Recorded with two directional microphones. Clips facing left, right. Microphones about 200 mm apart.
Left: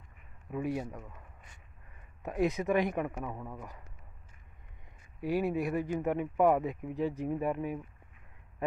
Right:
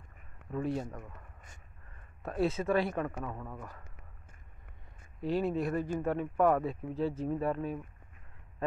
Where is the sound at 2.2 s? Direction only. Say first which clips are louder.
Left 1 dB; 15° left (ahead or behind).